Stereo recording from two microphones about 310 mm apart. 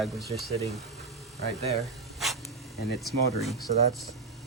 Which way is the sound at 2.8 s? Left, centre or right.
Left.